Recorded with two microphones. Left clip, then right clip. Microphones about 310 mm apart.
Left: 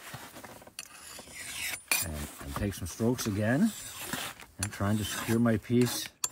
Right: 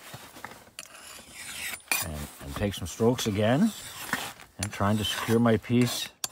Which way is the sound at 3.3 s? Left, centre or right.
Centre.